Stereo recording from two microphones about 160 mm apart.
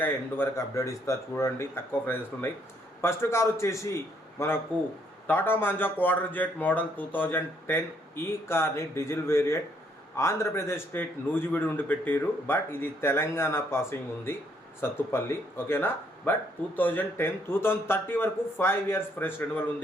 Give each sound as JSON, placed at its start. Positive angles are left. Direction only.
{"t": 0.0, "sound": "speech", "side_deg": 15}